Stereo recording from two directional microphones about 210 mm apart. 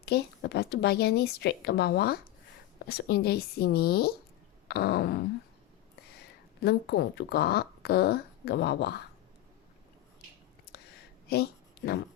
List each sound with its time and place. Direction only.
0.0 s a woman's voice: 50° left (ahead or behind)
10.7 s a sound: 50° left (ahead or behind)
11.3 s a woman's voice: 50° left (ahead or behind)